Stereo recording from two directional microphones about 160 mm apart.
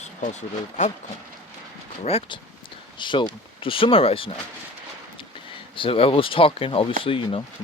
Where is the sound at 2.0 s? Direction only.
40° left (ahead or behind).